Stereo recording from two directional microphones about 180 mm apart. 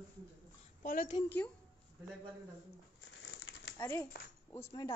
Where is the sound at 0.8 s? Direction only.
50° left (ahead or behind).